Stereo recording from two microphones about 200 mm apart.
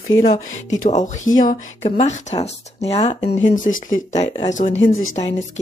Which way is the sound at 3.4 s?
40° left (ahead or behind).